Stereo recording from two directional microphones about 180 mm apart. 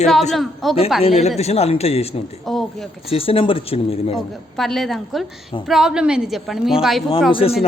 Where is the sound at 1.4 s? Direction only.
35° left (ahead or behind).